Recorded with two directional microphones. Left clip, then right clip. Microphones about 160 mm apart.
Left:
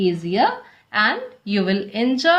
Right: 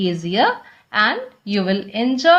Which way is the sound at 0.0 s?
35° right (ahead or behind).